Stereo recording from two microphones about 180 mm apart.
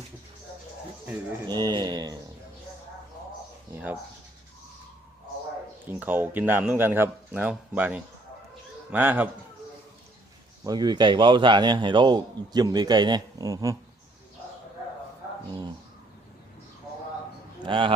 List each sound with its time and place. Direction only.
1.5 s a man's voice: 25° right (ahead or behind)
3.7 s speech: 10° right (ahead or behind)
5.8 s speech: 10° right (ahead or behind)
10.6 s a man's voice: 20° right (ahead or behind)
17.6 s a man's voice: 30° right (ahead or behind)